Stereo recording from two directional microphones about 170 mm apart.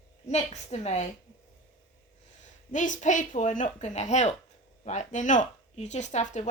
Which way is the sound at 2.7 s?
50° left (ahead or behind).